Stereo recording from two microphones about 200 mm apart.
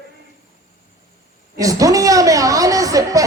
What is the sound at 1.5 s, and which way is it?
A man's voice, 15° right (ahead or behind).